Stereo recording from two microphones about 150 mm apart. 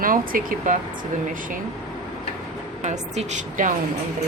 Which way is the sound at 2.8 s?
50° right (ahead or behind).